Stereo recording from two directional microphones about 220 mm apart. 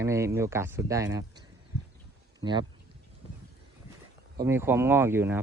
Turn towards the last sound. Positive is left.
turn(degrees=-10)  # may be behind; listen again after turning